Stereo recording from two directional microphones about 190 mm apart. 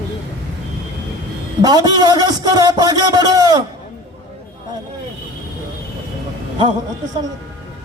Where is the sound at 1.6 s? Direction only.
20° right (ahead or behind).